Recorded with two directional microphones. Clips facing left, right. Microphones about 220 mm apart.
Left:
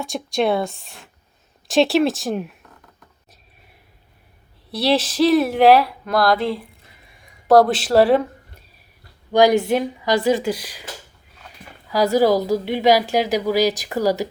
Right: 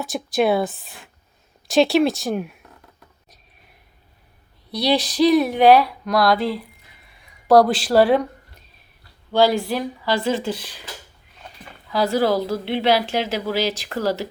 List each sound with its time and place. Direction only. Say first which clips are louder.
0.0 s speech: right 1 dB; 5° right (ahead or behind)
4.7 s speech: left 1 dB; centre (ahead or behind)
9.3 s a woman's voice: left 3 dB; 15° left (ahead or behind)
11.9 s a woman's voice: left 3 dB; 15° left (ahead or behind)